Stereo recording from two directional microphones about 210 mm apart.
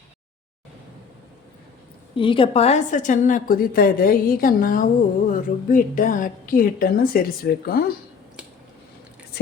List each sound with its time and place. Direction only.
2.1 s a woman's voice: 25° left (ahead or behind); by 7.9 s 45° left (ahead or behind)